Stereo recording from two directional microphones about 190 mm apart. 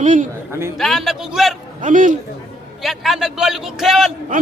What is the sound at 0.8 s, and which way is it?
Speech, centre (ahead or behind).